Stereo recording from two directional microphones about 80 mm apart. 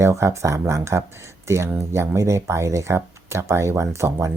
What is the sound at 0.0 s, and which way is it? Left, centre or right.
Speech, right.